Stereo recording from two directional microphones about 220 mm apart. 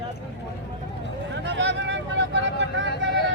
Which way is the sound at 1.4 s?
55° right (ahead or behind).